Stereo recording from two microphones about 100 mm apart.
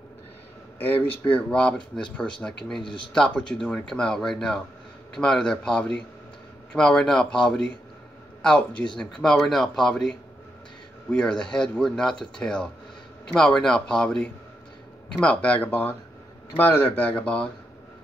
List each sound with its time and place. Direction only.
1.0 s speech: 65° left (ahead or behind)
1.3 s speech: 10° left (ahead or behind)
1.8 s speech: 55° left (ahead or behind)
3.1 s a man's voice: 5° left (ahead or behind)